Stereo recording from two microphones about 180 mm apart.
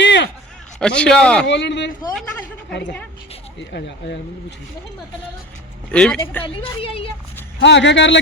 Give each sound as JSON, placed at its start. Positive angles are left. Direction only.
{"t": 0.0, "sound": "a sound", "side_deg": 75}
{"t": 0.8, "sound": "speech", "side_deg": 5}
{"t": 1.5, "sound": "a man's voice", "side_deg": 75}
{"t": 3.7, "sound": "speech", "side_deg": 65}
{"t": 5.9, "sound": "speech", "side_deg": 5}
{"t": 6.6, "sound": "a woman's voice", "side_deg": 30}
{"t": 7.6, "sound": "a man's voice", "side_deg": 80}